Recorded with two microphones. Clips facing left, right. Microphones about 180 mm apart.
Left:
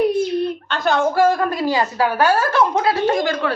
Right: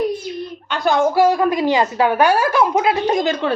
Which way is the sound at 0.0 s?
65° left (ahead or behind).